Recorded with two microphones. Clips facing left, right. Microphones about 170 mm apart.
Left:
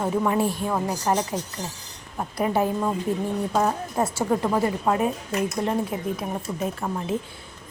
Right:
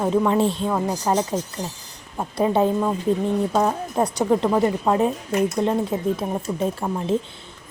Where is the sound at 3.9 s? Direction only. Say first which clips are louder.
Right 3 dB; 15° right (ahead or behind).